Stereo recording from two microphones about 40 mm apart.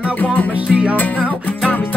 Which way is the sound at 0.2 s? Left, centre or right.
Left.